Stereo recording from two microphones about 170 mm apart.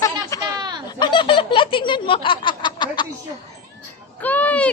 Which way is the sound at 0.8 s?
25° left (ahead or behind).